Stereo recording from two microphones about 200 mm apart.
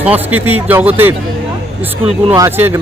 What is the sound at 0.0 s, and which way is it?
Speech, 10° right (ahead or behind).